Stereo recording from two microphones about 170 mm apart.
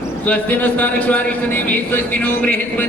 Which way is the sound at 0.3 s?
10° left (ahead or behind).